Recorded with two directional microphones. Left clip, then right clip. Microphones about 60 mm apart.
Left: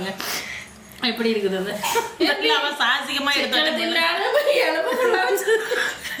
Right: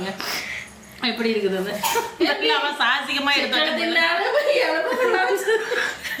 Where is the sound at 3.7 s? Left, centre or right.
Left.